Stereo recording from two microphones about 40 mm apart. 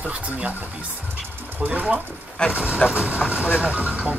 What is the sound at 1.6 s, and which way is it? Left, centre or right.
Speech, right.